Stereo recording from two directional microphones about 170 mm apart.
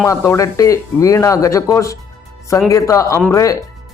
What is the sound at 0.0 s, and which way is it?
Speech, 15° left (ahead or behind).